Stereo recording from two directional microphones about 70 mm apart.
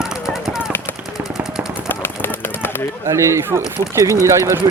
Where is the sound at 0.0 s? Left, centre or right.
Centre.